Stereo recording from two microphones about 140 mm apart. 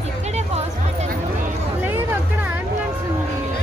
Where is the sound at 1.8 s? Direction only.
15° right (ahead or behind).